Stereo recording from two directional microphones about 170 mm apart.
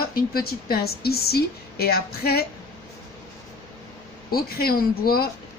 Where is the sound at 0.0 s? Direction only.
65° left (ahead or behind).